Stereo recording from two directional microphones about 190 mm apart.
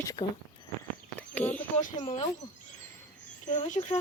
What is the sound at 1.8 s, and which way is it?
Speech, 35° left (ahead or behind).